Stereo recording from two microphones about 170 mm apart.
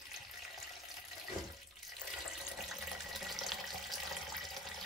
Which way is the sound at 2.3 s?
Centre (ahead or behind).